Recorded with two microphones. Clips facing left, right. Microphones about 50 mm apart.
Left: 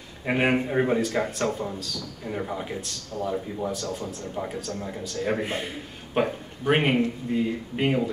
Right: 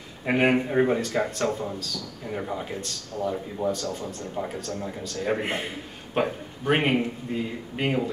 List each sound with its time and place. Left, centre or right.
0.2 s speech: centre
5.4 s a man's voice: right
6.1 s speech: centre